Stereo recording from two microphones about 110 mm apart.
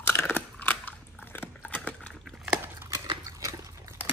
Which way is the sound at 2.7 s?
30° right (ahead or behind).